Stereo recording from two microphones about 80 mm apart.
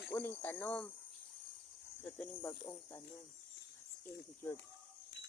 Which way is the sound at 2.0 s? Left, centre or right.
Centre.